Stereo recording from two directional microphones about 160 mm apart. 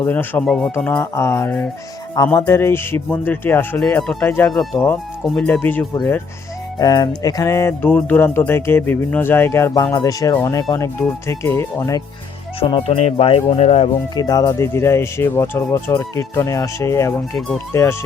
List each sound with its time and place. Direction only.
0.0 s speech: 10° left (ahead or behind)
6.7 s speech: 25° left (ahead or behind)
12.5 s speech: 35° left (ahead or behind)
14.2 s speech: 25° left (ahead or behind)